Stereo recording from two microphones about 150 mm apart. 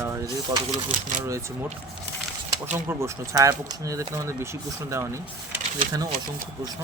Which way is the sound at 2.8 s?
20° right (ahead or behind).